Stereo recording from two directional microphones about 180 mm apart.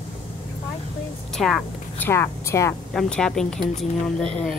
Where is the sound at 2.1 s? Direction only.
15° left (ahead or behind).